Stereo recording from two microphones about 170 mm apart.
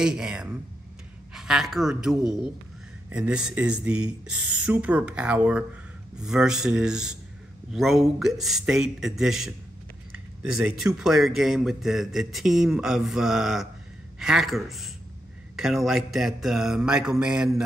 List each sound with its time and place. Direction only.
0.0 s speech: 5° right (ahead or behind)